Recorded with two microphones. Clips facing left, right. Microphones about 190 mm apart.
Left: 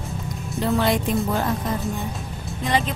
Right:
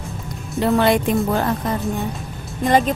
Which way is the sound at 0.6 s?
65° right (ahead or behind).